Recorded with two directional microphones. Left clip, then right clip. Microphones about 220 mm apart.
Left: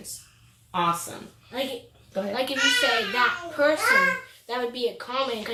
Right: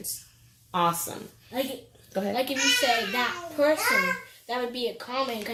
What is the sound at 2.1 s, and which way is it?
Speech, 55° right (ahead or behind).